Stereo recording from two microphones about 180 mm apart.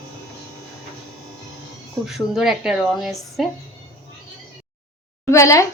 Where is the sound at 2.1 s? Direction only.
Centre (ahead or behind).